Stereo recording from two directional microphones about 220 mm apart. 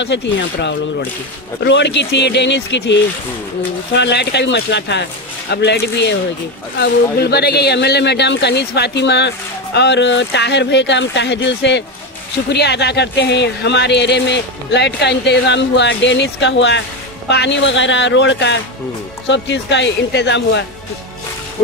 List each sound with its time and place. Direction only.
0.0 s speech: 50° left (ahead or behind)